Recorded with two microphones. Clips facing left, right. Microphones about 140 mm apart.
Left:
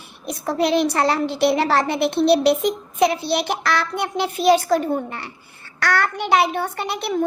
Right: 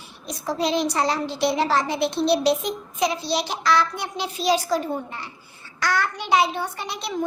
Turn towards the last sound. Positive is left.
turn(degrees=60)  # may be behind; listen again after turning